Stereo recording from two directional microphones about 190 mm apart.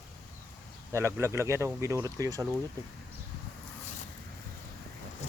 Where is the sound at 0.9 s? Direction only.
15° right (ahead or behind).